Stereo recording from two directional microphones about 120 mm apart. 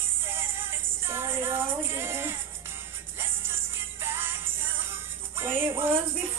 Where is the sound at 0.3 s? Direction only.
20° right (ahead or behind).